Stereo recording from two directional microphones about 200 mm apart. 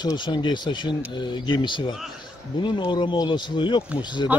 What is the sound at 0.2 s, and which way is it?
Speech, 25° left (ahead or behind).